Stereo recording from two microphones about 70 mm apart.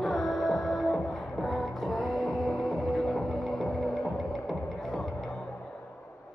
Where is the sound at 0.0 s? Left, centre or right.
Centre.